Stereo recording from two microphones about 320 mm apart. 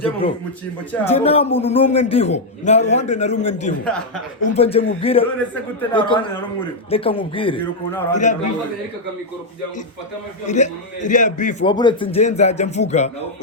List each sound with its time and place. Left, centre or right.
0.0 s a man's voice: centre
3.8 s speech: centre
4.4 s a man's voice: left
8.1 s a man's voice: left
10.4 s a man's voice: left